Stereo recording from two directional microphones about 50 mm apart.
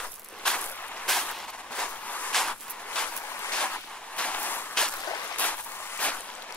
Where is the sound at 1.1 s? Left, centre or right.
Centre.